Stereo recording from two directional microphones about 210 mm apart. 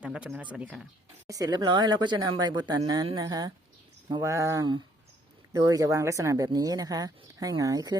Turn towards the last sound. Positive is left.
turn(degrees=-20)  # may be behind; listen again after turning